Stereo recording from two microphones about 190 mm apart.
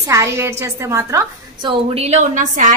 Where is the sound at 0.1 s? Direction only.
15° right (ahead or behind).